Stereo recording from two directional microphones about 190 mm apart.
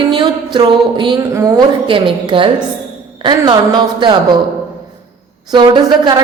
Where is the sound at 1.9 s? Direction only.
25° right (ahead or behind).